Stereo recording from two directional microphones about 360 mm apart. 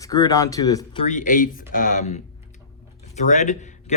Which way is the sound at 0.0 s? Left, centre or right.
Centre.